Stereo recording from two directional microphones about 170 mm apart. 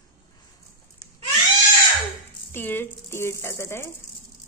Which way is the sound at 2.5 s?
10° left (ahead or behind).